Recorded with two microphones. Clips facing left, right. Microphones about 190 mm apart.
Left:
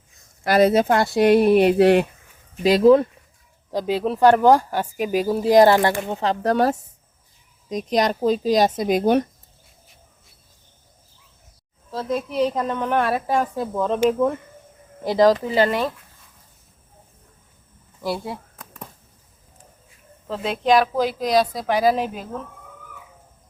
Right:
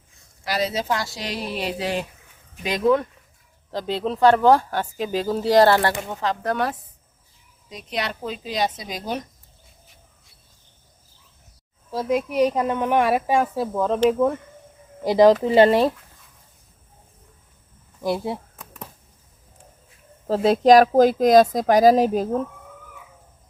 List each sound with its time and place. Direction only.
0.4 s speech: 55° left (ahead or behind)
2.6 s speech: 30° left (ahead or behind)
3.7 s speech: 10° left (ahead or behind)
6.1 s speech: 30° left (ahead or behind); by 9.2 s 55° left (ahead or behind)
11.9 s a woman's voice: 10° right (ahead or behind)
15.4 s speech: 25° right (ahead or behind)
18.0 s speech: 20° right (ahead or behind)
20.2 s speech: 40° right (ahead or behind)